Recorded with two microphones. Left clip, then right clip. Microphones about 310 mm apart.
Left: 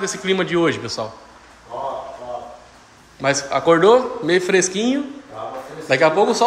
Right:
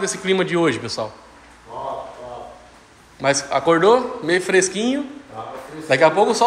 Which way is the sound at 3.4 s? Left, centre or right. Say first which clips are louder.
Left 2 dB; centre.